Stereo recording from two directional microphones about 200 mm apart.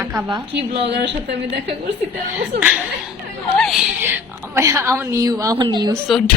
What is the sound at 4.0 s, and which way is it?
A woman's voice, 10° right (ahead or behind).